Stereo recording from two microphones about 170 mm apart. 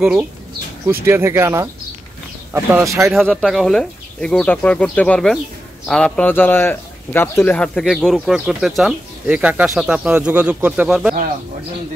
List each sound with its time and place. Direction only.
0.0 s speech: 5° right (ahead or behind)
3.1 s speech: 5° left (ahead or behind)